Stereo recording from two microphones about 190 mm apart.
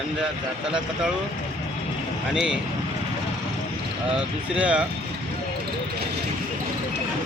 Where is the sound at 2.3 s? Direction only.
5° right (ahead or behind).